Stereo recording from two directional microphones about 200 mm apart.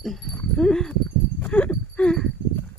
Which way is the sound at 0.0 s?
Centre (ahead or behind).